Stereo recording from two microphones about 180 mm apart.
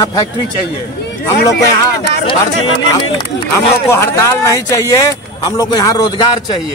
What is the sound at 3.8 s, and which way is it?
Speech, 15° left (ahead or behind).